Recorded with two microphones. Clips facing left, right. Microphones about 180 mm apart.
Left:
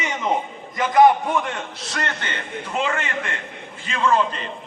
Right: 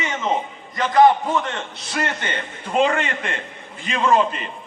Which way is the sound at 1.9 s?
10° right (ahead or behind).